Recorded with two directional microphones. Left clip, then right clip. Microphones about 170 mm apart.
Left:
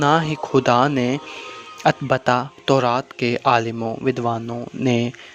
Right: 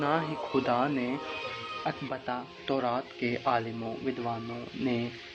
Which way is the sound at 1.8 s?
85° left.